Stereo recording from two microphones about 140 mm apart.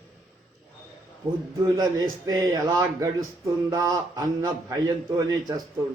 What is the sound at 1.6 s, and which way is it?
Speech, 25° right (ahead or behind).